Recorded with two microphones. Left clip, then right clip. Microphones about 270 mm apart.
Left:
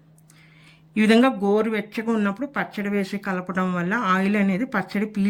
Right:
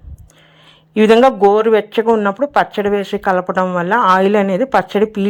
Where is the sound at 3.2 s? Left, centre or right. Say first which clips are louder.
Right 14 dB; right.